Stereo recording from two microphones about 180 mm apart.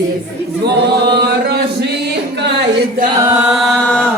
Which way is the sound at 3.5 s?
5° left (ahead or behind).